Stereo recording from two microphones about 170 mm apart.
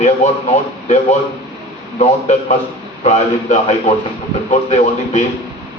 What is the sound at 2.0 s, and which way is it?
A man's voice, 40° left (ahead or behind).